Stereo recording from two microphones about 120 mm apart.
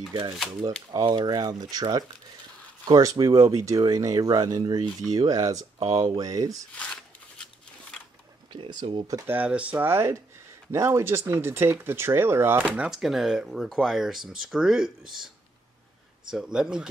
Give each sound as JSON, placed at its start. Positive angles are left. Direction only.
{"t": 0.7, "sound": "speech", "side_deg": -35}
{"t": 6.8, "sound": "a sound", "side_deg": 5}
{"t": 8.5, "sound": "speech", "side_deg": -40}
{"t": 9.3, "sound": "speech", "side_deg": -10}
{"t": 16.3, "sound": "speech", "side_deg": -5}